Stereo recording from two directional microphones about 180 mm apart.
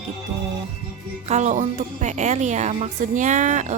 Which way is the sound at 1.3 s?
40° right (ahead or behind).